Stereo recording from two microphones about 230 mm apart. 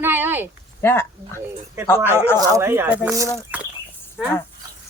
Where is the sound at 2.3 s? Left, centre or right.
Centre.